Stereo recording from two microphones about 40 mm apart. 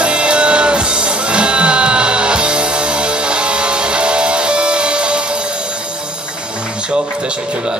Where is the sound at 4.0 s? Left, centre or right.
Right.